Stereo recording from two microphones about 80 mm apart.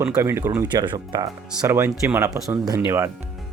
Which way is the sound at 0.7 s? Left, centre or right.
Right.